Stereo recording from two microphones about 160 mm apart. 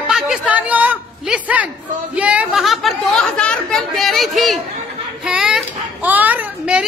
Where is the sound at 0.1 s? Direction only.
5° right (ahead or behind).